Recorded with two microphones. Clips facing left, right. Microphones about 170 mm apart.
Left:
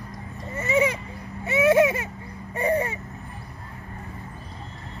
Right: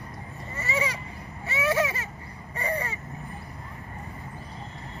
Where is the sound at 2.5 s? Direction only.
60° left (ahead or behind).